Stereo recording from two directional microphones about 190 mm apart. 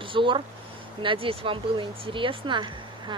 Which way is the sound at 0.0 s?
25° right (ahead or behind).